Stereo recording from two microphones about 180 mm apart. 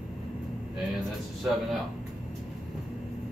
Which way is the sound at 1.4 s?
5° right (ahead or behind).